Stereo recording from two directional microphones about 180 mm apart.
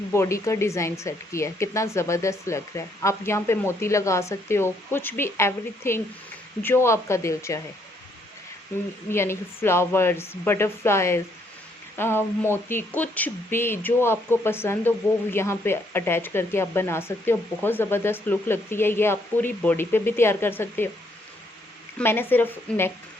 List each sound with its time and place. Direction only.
0.1 s speech: 15° left (ahead or behind)
9.0 s speech: 15° left (ahead or behind)
21.9 s speech: 10° left (ahead or behind)